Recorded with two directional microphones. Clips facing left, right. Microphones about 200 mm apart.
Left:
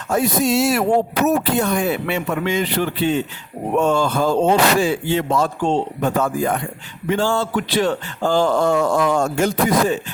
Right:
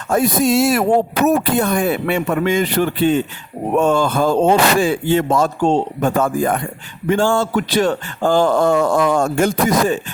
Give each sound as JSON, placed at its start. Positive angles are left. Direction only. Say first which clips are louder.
{"t": 0.1, "sound": "speech", "louder": "right 3 dB", "side_deg": -50}